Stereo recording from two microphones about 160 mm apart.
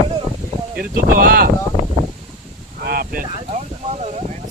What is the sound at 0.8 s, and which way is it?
Speech, 65° right (ahead or behind).